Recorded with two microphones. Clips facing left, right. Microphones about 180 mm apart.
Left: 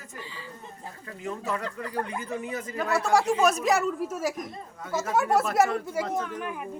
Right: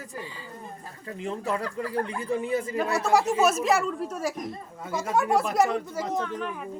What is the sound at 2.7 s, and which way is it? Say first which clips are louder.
A woman's voice: left 1 dB; 15° right (ahead or behind).